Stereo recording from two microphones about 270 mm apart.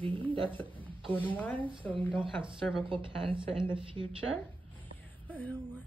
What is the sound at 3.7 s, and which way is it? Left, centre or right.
Speech, centre.